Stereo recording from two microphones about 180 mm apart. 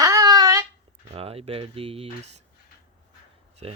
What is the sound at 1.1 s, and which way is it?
Speech, 35° right (ahead or behind).